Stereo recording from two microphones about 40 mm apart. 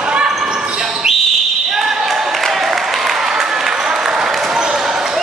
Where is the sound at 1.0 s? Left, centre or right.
Centre.